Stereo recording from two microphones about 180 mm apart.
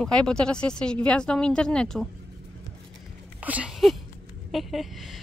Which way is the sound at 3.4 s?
5° right (ahead or behind).